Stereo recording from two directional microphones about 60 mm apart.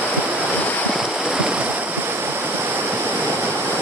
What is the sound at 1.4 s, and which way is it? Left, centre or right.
Waves, right.